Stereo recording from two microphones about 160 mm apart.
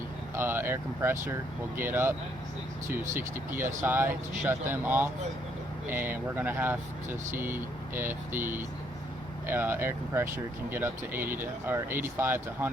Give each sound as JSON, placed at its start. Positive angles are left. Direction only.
{"t": 0.3, "sound": "speech", "side_deg": -15}